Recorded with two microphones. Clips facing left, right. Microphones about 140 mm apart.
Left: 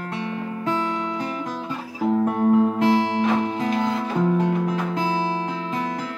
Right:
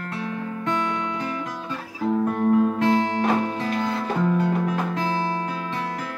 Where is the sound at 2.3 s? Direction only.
25° left (ahead or behind).